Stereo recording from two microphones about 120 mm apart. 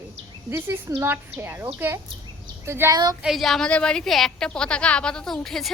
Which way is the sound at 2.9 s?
35° right (ahead or behind).